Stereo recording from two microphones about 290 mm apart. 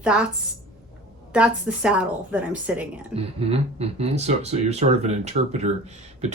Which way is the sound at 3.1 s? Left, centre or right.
Right.